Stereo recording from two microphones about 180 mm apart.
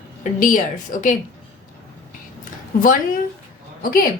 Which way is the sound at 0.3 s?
50° left (ahead or behind).